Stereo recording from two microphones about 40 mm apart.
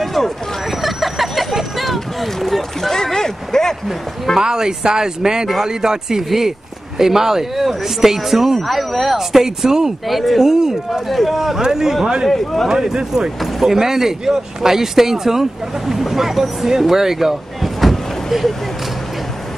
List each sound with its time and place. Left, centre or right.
0.0 s vehicle: centre
2.9 s a sound: centre
4.4 s speech: centre
10.4 s speech: centre
11.1 s speech: centre
12.3 s speech: centre
12.6 s speech: centre
17.7 s vehicle: centre